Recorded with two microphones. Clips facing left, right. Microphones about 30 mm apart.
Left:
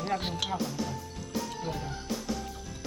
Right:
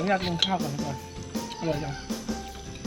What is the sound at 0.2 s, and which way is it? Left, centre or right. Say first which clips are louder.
Speech: right 5 dB; right.